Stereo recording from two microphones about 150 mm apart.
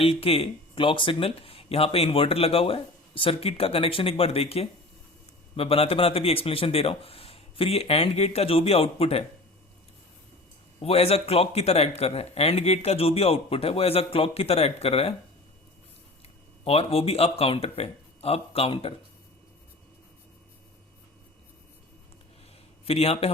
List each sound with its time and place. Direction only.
0.0 s speech: 40° left (ahead or behind)
10.8 s speech: 40° left (ahead or behind)
16.6 s speech: 40° left (ahead or behind)
22.9 s speech: 40° left (ahead or behind)